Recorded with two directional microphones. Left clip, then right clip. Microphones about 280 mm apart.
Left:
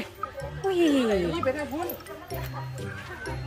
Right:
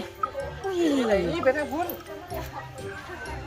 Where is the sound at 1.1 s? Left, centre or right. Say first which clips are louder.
Right 3 dB; centre.